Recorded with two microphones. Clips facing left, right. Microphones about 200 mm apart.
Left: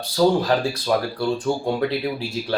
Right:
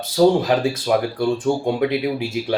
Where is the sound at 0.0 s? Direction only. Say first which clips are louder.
Right 3 dB; 20° right (ahead or behind).